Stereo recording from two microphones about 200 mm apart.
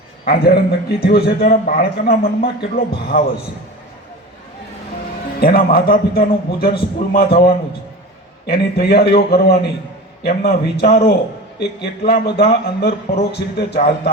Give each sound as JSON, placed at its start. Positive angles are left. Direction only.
{"t": 0.3, "sound": "a man's voice", "side_deg": 50}
{"t": 5.4, "sound": "a man's voice", "side_deg": 50}